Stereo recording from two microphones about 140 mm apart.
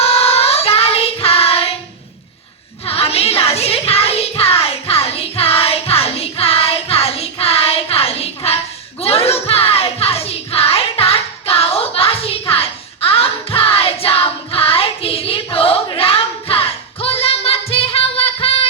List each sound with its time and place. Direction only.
0.0 s child singing: 45° left (ahead or behind)
2.8 s music: 45° left (ahead or behind)